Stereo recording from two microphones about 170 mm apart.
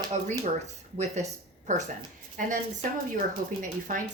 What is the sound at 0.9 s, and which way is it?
A woman's voice, 40° right (ahead or behind).